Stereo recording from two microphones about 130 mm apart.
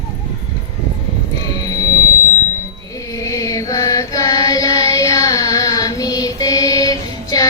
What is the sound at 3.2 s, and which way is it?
Mantra, 25° left (ahead or behind).